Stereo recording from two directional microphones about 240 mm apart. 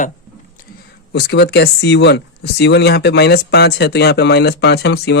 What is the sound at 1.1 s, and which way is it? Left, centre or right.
Speech, left.